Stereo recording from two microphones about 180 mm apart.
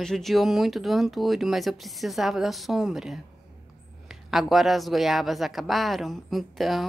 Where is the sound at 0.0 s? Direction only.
Centre (ahead or behind).